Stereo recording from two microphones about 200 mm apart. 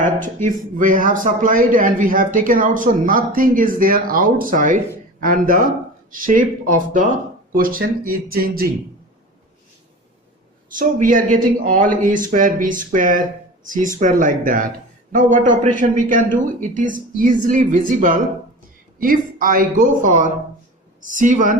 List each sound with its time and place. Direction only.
0.4 s a man's voice: 40° right (ahead or behind)
10.7 s a man's voice: 40° right (ahead or behind)